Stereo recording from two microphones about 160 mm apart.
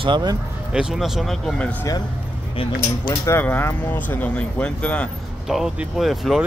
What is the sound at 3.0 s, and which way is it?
Speech, 15° left (ahead or behind).